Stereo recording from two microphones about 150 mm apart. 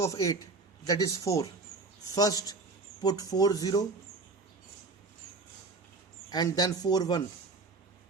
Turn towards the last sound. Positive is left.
turn(degrees=25)  # may be behind; listen again after turning